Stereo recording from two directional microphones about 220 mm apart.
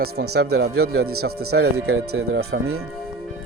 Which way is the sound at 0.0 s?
45° right (ahead or behind).